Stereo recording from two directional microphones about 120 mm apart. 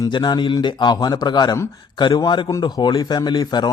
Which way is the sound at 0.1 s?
40° left (ahead or behind).